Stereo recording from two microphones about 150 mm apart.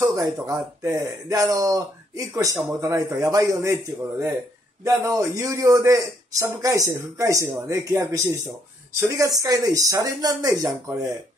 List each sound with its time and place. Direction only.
0.0 s speech: 20° right (ahead or behind)
4.8 s speech: 20° right (ahead or behind)